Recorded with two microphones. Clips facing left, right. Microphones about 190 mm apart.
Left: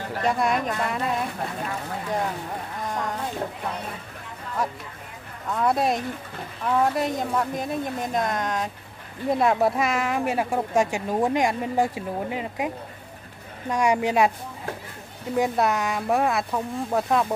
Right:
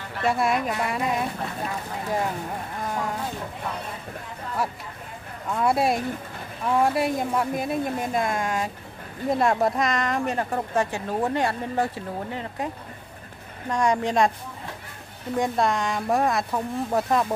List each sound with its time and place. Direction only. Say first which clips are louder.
0.2 s speech: right 1 dB; 5° right (ahead or behind)
2.9 s speech: even; 5° right (ahead or behind)
5.5 s speech: even; 10° right (ahead or behind); by 14.3 s 10° left (ahead or behind)
15.3 s speech: left 1 dB; 5° left (ahead or behind)